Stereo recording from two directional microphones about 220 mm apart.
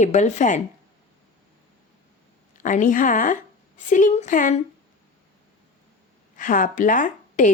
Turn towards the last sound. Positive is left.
turn(degrees=35)  # may be behind; listen again after turning